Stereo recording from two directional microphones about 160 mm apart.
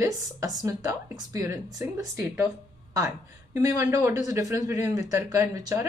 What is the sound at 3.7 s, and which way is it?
Speech, 20° right (ahead or behind).